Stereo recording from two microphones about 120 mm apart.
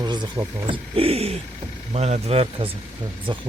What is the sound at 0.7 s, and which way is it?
Speech, 50° right (ahead or behind).